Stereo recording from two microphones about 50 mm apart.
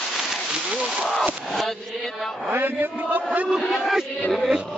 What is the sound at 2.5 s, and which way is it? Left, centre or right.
Chant, right.